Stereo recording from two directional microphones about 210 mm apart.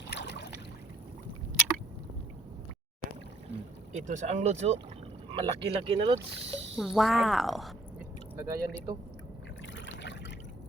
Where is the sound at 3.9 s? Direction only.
35° right (ahead or behind).